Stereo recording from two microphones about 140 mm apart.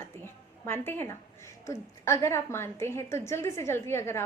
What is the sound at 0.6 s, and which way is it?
A woman's voice, 15° left (ahead or behind).